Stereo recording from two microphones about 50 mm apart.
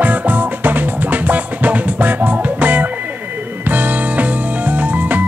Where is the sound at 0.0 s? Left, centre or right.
Right.